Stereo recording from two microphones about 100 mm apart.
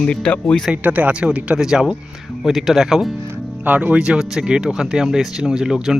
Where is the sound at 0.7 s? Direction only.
15° right (ahead or behind).